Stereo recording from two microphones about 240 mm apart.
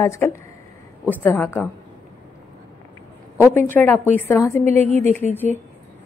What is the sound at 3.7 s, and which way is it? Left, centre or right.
Speech, centre.